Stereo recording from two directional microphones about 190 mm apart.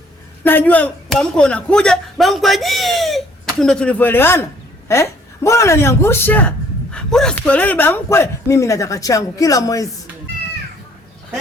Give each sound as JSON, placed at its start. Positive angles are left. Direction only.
{"t": 0.4, "sound": "a man's voice", "side_deg": 10}